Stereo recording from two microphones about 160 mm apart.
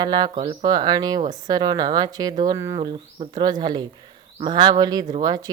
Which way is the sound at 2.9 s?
30° right (ahead or behind).